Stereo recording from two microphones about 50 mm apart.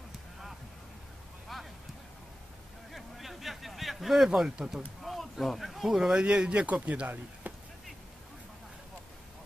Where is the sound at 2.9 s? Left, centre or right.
Centre.